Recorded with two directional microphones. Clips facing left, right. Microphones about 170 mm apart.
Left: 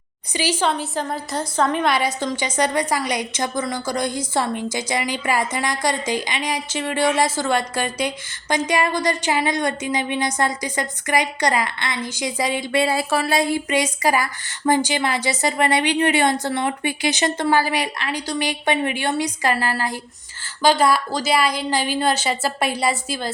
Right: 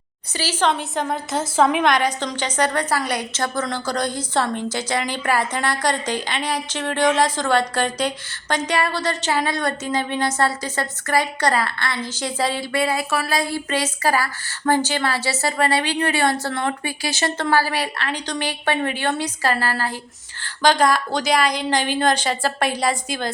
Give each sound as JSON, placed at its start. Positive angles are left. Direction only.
{"t": 0.3, "sound": "a woman's voice", "side_deg": 15}
{"t": 0.7, "sound": "a woman's voice", "side_deg": 0}
{"t": 1.8, "sound": "a woman's voice", "side_deg": 10}
{"t": 12.7, "sound": "a woman's voice", "side_deg": 25}